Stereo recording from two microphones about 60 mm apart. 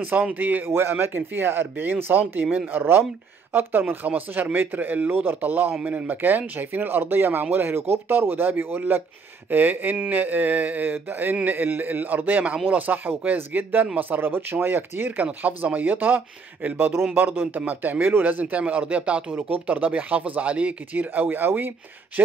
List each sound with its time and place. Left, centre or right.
0.3 s a man's voice: right
0.7 s a man's voice: right
2.8 s a man's voice: right